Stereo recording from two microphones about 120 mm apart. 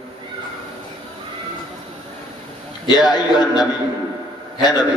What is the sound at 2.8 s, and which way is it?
A man's voice, 35° left (ahead or behind).